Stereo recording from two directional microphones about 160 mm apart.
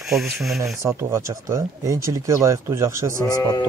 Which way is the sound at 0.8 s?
20° right (ahead or behind).